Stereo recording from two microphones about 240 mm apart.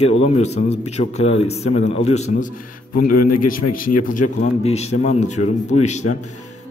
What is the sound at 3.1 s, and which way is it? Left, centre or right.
Speech, left.